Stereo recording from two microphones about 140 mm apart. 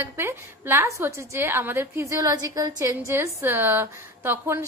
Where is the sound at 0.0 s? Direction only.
15° right (ahead or behind).